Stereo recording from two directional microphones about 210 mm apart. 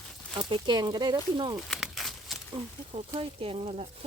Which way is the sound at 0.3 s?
20° right (ahead or behind).